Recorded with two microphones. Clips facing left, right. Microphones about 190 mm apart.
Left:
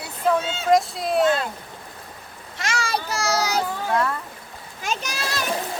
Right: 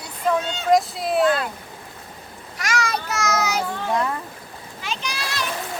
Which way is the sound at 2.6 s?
30° left (ahead or behind).